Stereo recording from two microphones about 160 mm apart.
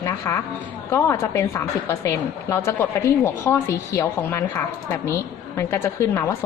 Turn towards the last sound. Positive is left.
turn(degrees=15)  # may be behind; listen again after turning